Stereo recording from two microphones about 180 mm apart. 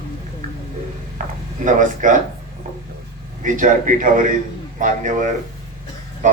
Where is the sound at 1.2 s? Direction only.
45° right (ahead or behind).